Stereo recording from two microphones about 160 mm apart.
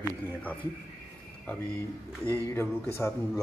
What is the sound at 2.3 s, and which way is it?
Speech, 15° left (ahead or behind).